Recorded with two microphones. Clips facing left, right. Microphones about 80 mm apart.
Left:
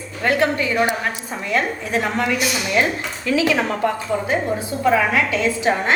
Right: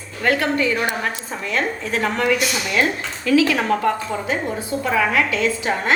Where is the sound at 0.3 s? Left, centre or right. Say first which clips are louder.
Even; left.